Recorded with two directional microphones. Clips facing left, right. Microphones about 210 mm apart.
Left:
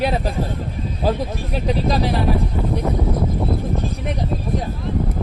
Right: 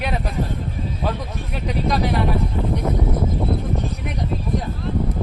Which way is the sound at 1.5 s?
30° left (ahead or behind).